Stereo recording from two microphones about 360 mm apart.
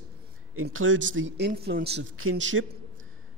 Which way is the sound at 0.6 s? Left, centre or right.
Right.